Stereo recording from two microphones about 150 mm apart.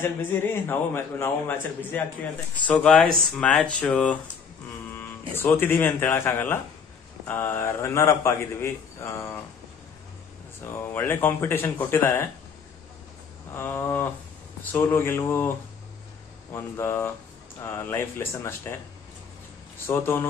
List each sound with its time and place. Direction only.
0.0 s a man's voice: 15° left (ahead or behind)
10.6 s a man's voice: 15° left (ahead or behind)
13.6 s a man's voice: 15° left (ahead or behind)
16.5 s a man's voice: 15° left (ahead or behind)
19.9 s a man's voice: 15° left (ahead or behind)